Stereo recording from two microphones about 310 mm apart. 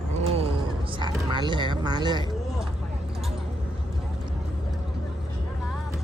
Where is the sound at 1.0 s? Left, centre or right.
Centre.